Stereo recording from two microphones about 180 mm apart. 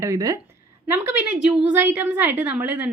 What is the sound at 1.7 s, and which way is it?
A woman's voice, 10° right (ahead or behind).